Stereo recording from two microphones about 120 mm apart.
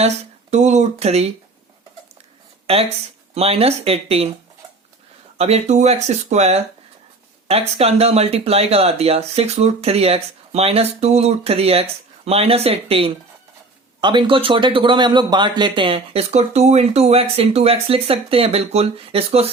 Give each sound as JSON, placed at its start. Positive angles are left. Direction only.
{"t": 0.0, "sound": "speech", "side_deg": -70}
{"t": 3.3, "sound": "speech", "side_deg": -55}
{"t": 5.4, "sound": "speech", "side_deg": -65}
{"t": 14.0, "sound": "speech", "side_deg": -40}
{"t": 16.3, "sound": "speech", "side_deg": -65}